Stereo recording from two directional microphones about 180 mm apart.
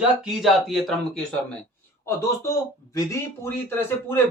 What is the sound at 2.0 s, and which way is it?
Speech, 15° left (ahead or behind).